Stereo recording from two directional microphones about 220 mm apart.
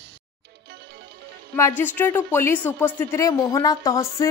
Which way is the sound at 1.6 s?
10° left (ahead or behind).